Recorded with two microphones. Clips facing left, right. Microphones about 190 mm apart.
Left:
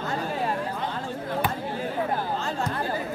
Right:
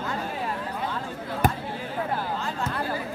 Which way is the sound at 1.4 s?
45° right (ahead or behind).